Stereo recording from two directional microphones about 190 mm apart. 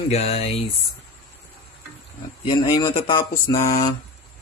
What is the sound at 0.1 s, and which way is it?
Speech, 30° left (ahead or behind).